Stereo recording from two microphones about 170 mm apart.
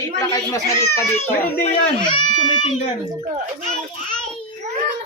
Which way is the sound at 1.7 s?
25° left (ahead or behind).